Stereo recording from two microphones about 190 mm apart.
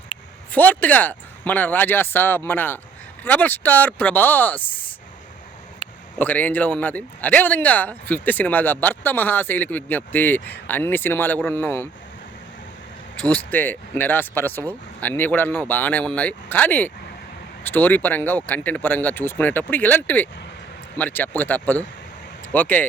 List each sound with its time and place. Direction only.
0.5 s speech: 10° left (ahead or behind)
5.8 s a sound: 25° left (ahead or behind)
6.1 s speech: 10° left (ahead or behind)
13.3 s speech: 10° left (ahead or behind)